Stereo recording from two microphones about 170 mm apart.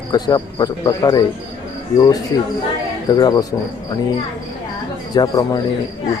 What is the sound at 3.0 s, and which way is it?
Speech, 25° left (ahead or behind).